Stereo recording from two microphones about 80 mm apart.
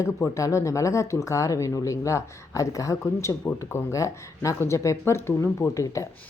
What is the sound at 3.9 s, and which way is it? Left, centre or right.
Speech, left.